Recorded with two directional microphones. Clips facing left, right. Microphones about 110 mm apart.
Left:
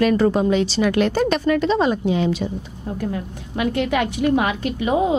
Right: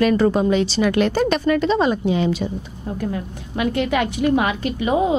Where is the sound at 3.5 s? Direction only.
15° right (ahead or behind).